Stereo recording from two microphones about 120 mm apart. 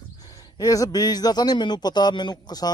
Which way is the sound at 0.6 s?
30° left (ahead or behind).